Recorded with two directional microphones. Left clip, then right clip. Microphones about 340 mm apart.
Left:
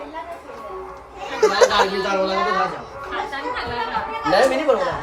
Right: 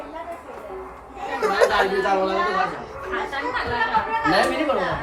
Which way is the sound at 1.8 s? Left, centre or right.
Centre.